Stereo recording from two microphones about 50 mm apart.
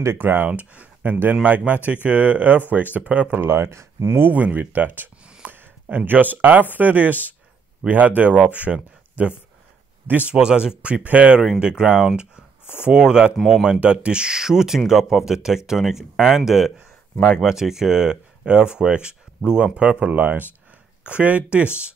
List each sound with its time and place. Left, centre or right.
0.2 s speech: right
0.5 s speech: right
3.4 s speech: right
4.3 s speech: right
10.3 s speech: centre